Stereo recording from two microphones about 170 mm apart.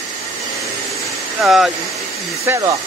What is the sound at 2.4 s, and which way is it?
Speech, 20° right (ahead or behind).